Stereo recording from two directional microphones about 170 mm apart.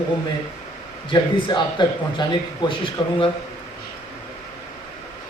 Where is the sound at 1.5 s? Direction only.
25° left (ahead or behind).